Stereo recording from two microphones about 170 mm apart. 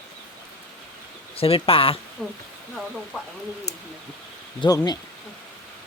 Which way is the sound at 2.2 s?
5° left (ahead or behind).